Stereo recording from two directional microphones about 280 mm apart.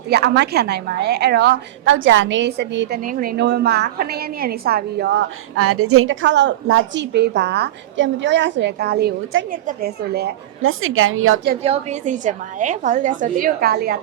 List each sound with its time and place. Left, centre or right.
0.1 s a woman's voice: right
5.5 s a woman's voice: right
11.6 s a woman's voice: right